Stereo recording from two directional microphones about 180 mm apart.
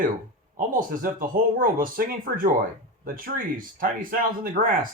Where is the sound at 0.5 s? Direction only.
50° right (ahead or behind).